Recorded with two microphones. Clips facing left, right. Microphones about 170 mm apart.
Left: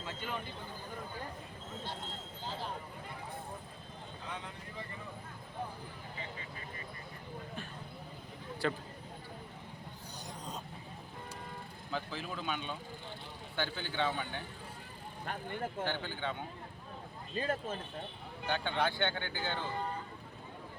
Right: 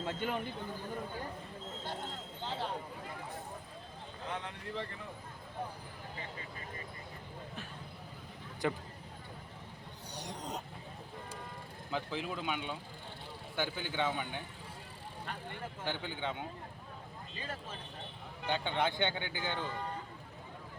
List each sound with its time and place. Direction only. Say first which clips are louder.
0.0 s speech: right 5 dB; 55° right (ahead or behind)
2.4 s speech: right 3 dB; 65° right (ahead or behind)
8.6 s speech: even; 15° right (ahead or behind)
10.2 s a sound: right 4 dB; 75° right (ahead or behind)
11.9 s speech: right 2 dB; 15° right (ahead or behind)
15.8 s speech: right 2 dB; 15° right (ahead or behind)
17.4 s speech: left 8 dB; 50° left (ahead or behind)
18.4 s speech: even; 15° right (ahead or behind)